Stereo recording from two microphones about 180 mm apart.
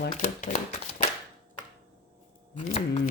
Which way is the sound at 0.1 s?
35° left (ahead or behind).